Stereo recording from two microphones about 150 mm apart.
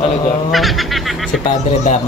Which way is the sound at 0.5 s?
Centre (ahead or behind).